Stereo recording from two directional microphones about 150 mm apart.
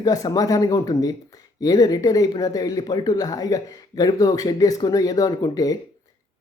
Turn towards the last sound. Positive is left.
turn(degrees=25)  # may be behind; listen again after turning